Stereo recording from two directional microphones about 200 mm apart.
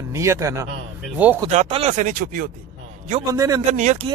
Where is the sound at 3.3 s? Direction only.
15° right (ahead or behind).